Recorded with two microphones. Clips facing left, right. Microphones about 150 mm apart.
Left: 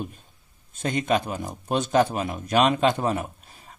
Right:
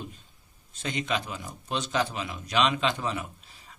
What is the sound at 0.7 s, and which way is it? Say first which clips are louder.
Speech: left 7 dB; 50° left (ahead or behind).